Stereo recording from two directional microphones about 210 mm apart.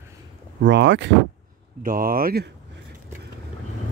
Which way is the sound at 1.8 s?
45° right (ahead or behind).